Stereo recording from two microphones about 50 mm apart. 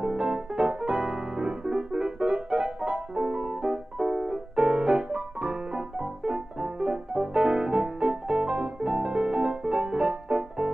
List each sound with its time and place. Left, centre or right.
0.0 s piano: centre